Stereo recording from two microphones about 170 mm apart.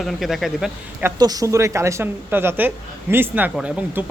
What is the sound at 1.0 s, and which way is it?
A woman's voice, 20° right (ahead or behind).